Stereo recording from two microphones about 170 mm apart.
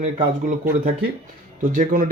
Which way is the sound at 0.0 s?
45° right (ahead or behind).